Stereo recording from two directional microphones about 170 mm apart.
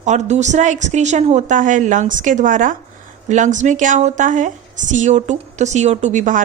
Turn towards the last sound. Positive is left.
turn(degrees=-50)  # may be behind; listen again after turning